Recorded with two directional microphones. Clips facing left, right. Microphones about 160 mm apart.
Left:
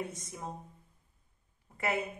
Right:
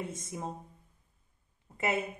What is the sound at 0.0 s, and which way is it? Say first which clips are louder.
Speech: right 2 dB; 20° right (ahead or behind).